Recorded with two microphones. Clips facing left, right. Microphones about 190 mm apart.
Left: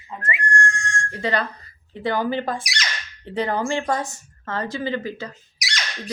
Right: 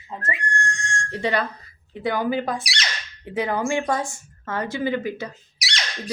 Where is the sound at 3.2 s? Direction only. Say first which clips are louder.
Even; 5° right (ahead or behind).